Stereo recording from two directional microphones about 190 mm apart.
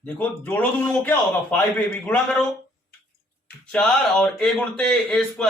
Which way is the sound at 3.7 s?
5° left (ahead or behind).